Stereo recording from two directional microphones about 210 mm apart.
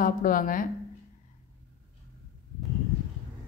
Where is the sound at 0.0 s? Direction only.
40° left (ahead or behind).